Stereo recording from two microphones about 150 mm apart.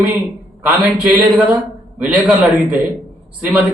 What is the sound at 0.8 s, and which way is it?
A man's voice, 10° right (ahead or behind).